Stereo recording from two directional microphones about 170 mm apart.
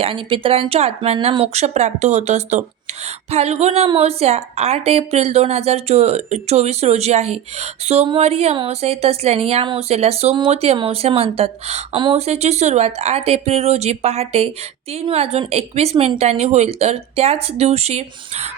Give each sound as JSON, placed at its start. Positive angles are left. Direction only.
{"t": 0.0, "sound": "a woman's voice", "side_deg": -30}